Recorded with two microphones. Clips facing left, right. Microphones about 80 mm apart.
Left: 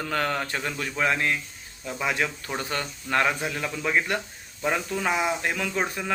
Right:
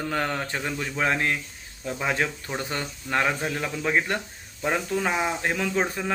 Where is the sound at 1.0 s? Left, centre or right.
Right.